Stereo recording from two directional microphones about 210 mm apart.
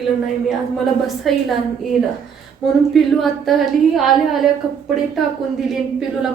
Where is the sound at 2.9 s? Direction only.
Centre (ahead or behind).